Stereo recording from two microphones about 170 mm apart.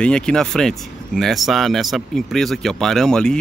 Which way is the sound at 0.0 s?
5° left (ahead or behind).